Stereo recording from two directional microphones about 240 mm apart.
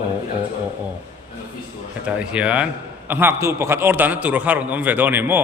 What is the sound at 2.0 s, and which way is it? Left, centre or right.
A man's voice, centre.